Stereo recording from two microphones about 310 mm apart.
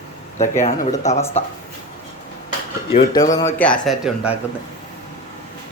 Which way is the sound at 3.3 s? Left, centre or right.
Centre.